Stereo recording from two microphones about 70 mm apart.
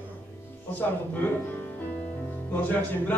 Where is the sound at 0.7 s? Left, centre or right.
Left.